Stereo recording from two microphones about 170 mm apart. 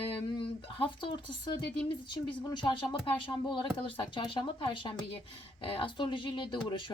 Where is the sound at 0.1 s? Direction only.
30° left (ahead or behind).